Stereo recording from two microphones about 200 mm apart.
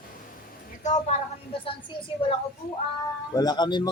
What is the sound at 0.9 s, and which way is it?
Speech, 35° left (ahead or behind).